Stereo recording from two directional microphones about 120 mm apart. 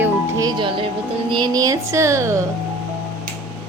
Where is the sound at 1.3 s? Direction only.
40° right (ahead or behind).